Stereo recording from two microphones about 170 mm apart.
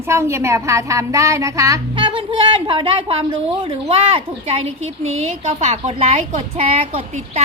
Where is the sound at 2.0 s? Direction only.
30° right (ahead or behind).